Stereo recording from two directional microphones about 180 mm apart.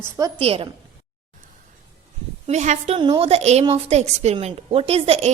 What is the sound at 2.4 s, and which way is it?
Speech, 40° right (ahead or behind).